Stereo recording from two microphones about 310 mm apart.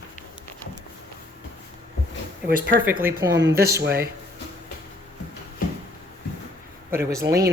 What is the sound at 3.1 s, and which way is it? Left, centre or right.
Speech, centre.